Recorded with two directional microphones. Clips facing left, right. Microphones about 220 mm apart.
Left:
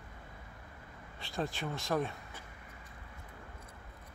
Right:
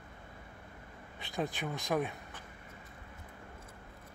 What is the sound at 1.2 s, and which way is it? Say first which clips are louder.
Speech: right 1 dB; 20° right (ahead or behind).